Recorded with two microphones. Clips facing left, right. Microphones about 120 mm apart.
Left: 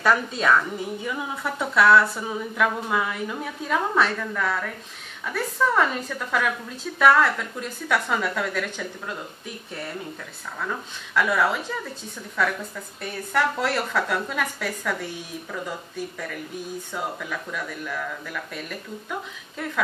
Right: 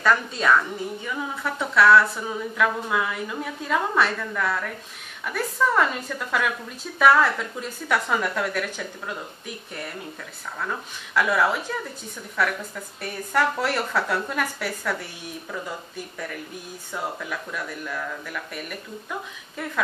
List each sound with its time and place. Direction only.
0.0 s a woman's voice: 5° left (ahead or behind)
10.6 s speech: 5° right (ahead or behind)
17.2 s speech: 10° right (ahead or behind)